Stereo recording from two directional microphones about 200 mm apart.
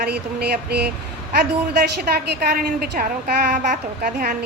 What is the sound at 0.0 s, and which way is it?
A woman's voice, 50° right (ahead or behind).